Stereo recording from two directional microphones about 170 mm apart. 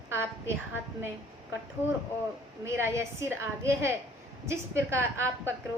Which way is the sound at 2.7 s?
15° right (ahead or behind).